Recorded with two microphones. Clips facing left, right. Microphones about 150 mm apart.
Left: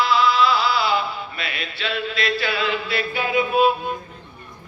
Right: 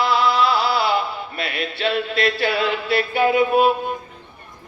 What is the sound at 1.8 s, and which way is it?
Speech, 55° right (ahead or behind).